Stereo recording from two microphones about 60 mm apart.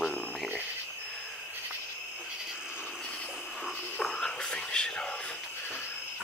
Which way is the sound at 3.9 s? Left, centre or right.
Centre.